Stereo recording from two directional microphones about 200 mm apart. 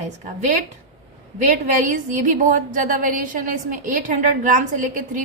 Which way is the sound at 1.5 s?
40° right (ahead or behind).